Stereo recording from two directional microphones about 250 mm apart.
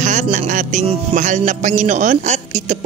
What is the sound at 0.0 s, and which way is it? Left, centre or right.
Music, right.